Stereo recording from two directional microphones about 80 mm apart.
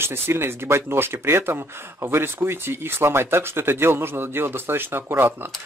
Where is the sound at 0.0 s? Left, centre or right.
Right.